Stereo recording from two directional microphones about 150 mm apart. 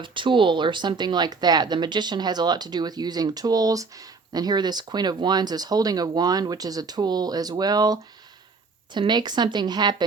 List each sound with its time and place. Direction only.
0.0 s speech: 35° right (ahead or behind)